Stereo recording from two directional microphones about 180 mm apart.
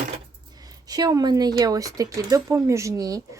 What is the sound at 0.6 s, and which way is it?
Speech, 20° right (ahead or behind).